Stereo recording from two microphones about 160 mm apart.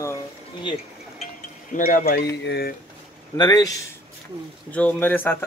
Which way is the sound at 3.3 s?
25° left (ahead or behind).